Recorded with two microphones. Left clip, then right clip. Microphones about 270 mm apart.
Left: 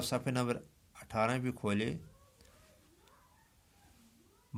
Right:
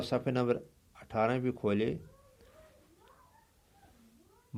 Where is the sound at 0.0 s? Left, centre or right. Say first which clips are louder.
Right 3 dB; left.